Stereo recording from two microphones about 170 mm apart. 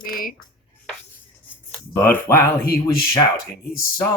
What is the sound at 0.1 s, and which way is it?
Dishes, 55° left (ahead or behind).